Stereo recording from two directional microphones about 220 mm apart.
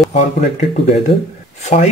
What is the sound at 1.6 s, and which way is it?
Speech, 30° left (ahead or behind).